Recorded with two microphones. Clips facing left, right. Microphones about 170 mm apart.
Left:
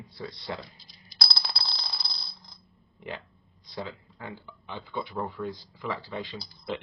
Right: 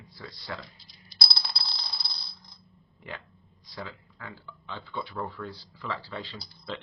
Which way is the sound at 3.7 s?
20° left (ahead or behind).